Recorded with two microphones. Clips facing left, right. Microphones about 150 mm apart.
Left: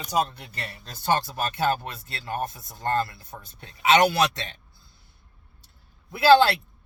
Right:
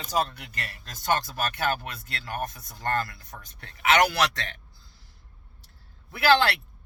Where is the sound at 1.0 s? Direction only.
25° left (ahead or behind).